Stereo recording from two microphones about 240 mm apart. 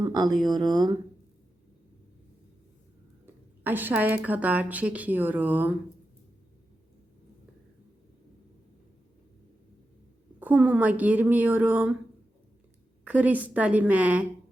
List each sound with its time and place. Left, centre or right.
0.0 s a sound: centre
0.4 s speech: centre
3.2 s speech: centre
10.4 s speech: centre
13.1 s a woman's voice: centre